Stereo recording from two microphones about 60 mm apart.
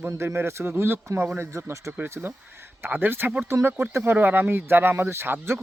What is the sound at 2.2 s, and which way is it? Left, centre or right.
Speech, right.